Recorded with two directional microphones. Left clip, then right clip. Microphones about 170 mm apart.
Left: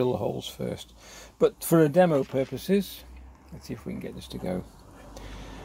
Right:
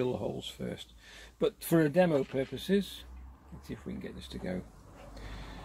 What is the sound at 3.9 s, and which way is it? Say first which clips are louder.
Speech: left 5 dB; 30° left (ahead or behind).